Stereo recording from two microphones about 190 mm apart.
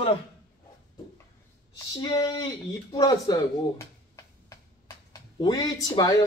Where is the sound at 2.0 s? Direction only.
20° left (ahead or behind).